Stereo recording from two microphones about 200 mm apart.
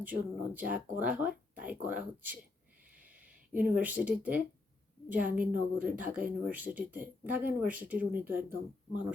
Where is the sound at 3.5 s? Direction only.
10° right (ahead or behind).